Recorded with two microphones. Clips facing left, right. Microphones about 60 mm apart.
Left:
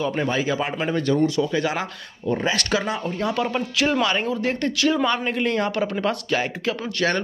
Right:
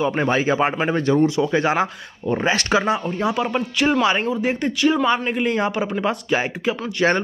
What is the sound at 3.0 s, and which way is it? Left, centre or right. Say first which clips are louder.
Speech: right 2 dB; centre.